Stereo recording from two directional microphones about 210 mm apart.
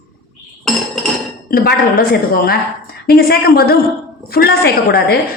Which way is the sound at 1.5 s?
45° left (ahead or behind).